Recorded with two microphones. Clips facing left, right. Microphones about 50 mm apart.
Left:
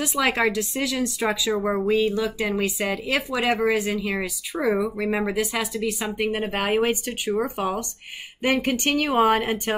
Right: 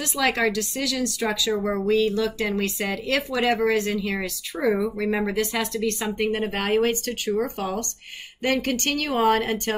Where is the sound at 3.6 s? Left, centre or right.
Centre.